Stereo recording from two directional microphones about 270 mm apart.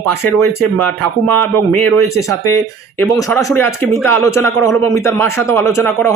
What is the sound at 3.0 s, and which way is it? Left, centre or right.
Speech, centre.